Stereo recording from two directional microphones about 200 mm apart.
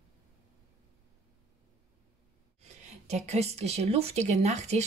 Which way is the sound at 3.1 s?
35° right (ahead or behind).